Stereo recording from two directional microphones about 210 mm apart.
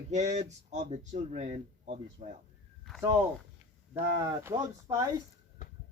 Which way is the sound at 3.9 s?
15° right (ahead or behind).